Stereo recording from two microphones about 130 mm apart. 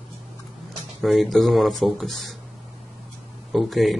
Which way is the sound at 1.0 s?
Centre (ahead or behind).